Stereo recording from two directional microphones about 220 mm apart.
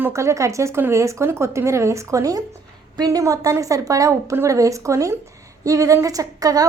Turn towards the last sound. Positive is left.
turn(degrees=-15)  # may be behind; listen again after turning